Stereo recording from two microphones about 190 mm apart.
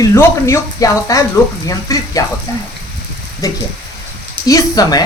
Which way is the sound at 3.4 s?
20° left (ahead or behind).